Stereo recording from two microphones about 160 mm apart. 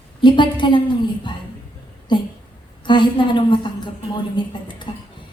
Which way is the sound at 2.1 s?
30° left (ahead or behind).